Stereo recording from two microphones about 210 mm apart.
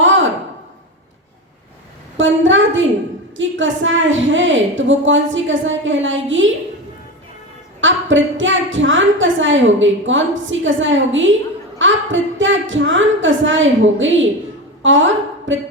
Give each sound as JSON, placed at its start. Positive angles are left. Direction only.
{"t": 0.0, "sound": "a sound", "side_deg": -65}
{"t": 2.1, "sound": "a woman's voice", "side_deg": -65}
{"t": 8.1, "sound": "a woman's voice", "side_deg": -65}